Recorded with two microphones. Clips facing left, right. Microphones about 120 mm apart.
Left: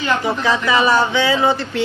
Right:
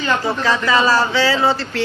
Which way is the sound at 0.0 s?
15° left (ahead or behind).